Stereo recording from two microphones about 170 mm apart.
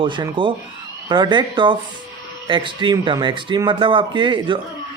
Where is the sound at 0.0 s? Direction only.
30° right (ahead or behind).